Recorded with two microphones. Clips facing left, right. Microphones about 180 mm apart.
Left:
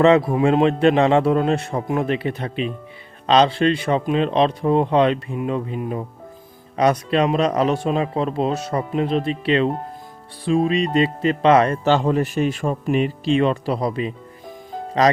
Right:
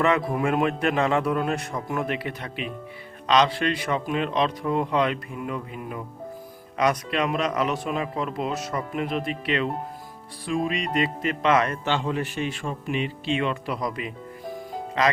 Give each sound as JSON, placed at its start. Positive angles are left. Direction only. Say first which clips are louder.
{"t": 0.0, "sound": "speech", "louder": "left 8 dB", "side_deg": 30}